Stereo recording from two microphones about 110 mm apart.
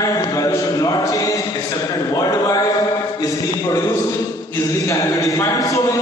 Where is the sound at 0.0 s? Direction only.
30° left (ahead or behind).